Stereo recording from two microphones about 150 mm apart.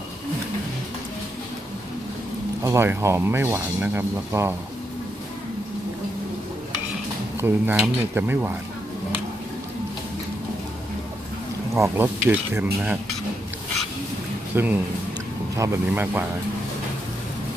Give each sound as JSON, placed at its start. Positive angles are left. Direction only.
{"t": 2.6, "sound": "speech", "side_deg": -15}
{"t": 7.3, "sound": "speech", "side_deg": -15}
{"t": 11.7, "sound": "speech", "side_deg": -15}
{"t": 14.5, "sound": "speech", "side_deg": -15}